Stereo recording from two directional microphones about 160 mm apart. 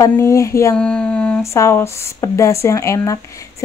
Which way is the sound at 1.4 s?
15° left (ahead or behind).